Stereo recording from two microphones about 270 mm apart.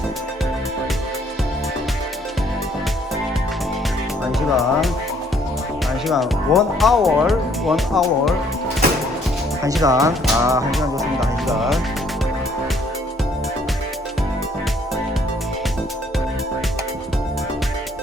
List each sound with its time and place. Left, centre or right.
4.4 s speech: centre
6.1 s speech: centre
9.8 s speech: centre
11.2 s music: centre